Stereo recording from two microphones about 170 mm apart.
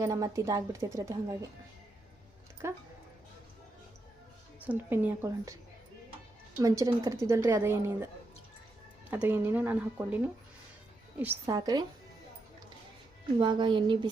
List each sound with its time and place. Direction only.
0.0 s speech: 20° right (ahead or behind)
2.6 s a woman's voice: 15° right (ahead or behind)
4.6 s a woman's voice: 10° right (ahead or behind)
6.6 s a woman's voice: 20° right (ahead or behind)
9.0 s a woman's voice: 10° right (ahead or behind)
13.4 s speech: 25° right (ahead or behind)